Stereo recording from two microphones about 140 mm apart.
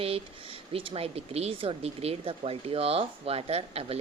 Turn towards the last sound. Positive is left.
turn(degrees=-45)  # may be behind; listen again after turning